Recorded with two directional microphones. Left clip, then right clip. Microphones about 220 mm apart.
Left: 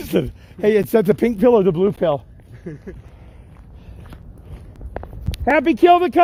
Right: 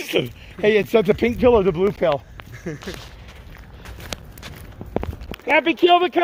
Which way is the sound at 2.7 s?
50° right (ahead or behind).